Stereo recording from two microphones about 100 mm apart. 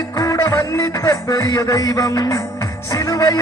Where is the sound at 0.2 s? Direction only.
35° left (ahead or behind).